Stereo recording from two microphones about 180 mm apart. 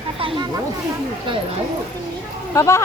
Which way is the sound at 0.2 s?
25° right (ahead or behind).